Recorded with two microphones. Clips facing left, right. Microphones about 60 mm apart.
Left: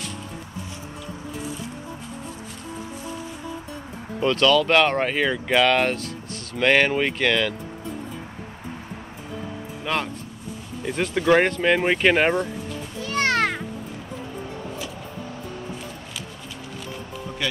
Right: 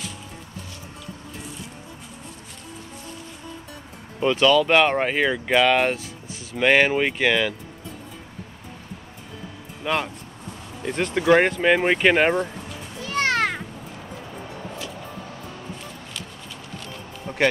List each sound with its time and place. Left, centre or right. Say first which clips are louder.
4.2 s speech: right 1 dB; centre
9.9 s speech: right 1 dB; centre
17.4 s music: right 8 dB; right